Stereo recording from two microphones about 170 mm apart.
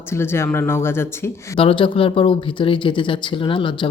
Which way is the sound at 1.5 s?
30° left (ahead or behind).